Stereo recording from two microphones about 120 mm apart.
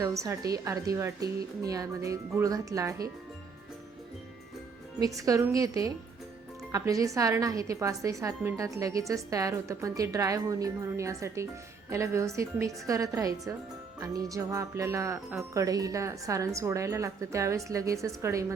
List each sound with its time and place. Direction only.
0.0 s speech: 25° right (ahead or behind)
4.9 s speech: 30° right (ahead or behind)